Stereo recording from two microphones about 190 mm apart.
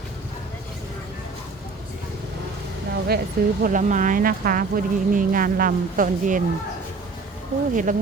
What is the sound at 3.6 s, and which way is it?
Speech, 45° right (ahead or behind).